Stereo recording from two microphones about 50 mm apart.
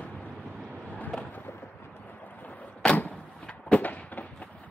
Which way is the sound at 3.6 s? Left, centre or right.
Left.